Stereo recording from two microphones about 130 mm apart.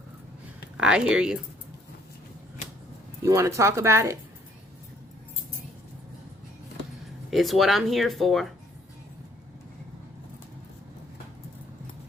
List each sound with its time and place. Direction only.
0.8 s speech: 5° right (ahead or behind)
3.2 s speech: 25° right (ahead or behind)
7.3 s speech: centre (ahead or behind)